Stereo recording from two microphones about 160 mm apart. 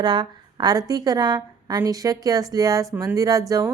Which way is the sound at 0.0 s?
25° right (ahead or behind).